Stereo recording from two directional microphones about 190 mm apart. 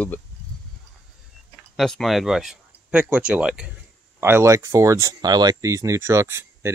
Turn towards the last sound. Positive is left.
turn(degrees=-15)  # may be behind; listen again after turning